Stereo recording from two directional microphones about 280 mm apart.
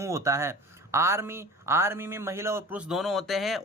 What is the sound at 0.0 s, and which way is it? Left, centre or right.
Speech, centre.